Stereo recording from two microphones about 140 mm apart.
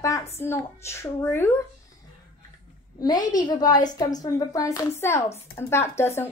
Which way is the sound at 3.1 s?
70° left (ahead or behind).